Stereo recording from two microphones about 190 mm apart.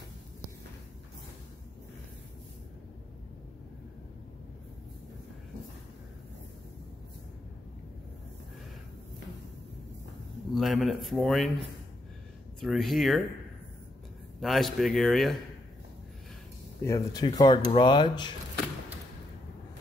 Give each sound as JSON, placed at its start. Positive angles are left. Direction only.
{"t": 10.5, "sound": "speech", "side_deg": 0}
{"t": 12.5, "sound": "speech", "side_deg": 0}
{"t": 14.4, "sound": "speech", "side_deg": 0}
{"t": 16.8, "sound": "speech", "side_deg": 20}